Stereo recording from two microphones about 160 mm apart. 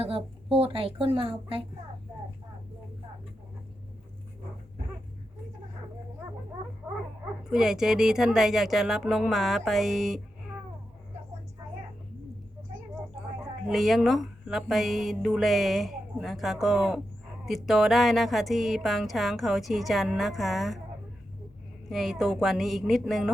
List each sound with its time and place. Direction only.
0.5 s speech: 35° right (ahead or behind)
7.5 s speech: 5° right (ahead or behind)
13.7 s speech: centre (ahead or behind)
21.8 s speech: centre (ahead or behind)